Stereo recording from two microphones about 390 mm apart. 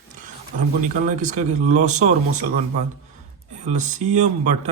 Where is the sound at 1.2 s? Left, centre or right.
Centre.